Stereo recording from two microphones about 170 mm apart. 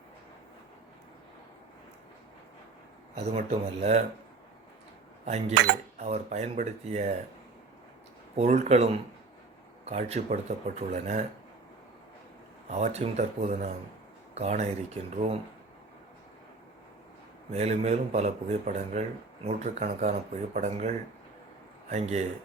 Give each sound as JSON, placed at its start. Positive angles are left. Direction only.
{"t": 3.3, "sound": "a man's voice", "side_deg": -40}
{"t": 5.2, "sound": "a man's voice", "side_deg": -40}
{"t": 8.4, "sound": "a man's voice", "side_deg": -40}
{"t": 12.6, "sound": "a man's voice", "side_deg": -40}
{"t": 17.5, "sound": "a man's voice", "side_deg": -40}